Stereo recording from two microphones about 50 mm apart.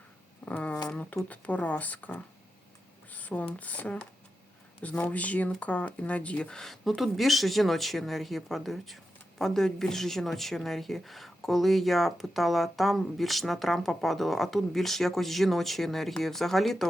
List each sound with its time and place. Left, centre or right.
0.4 s a sound: left
1.3 s speech: left
3.1 s a sound: left
3.6 s speech: left
6.5 s speech: centre
6.8 s a woman's voice: centre